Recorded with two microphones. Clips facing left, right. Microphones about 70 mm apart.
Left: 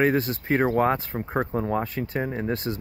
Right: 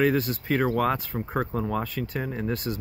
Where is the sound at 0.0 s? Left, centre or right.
Left.